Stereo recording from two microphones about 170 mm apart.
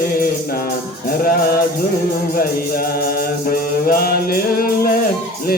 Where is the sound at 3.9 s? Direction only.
60° left (ahead or behind).